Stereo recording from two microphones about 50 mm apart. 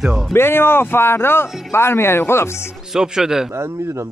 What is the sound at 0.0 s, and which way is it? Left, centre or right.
Speech, centre.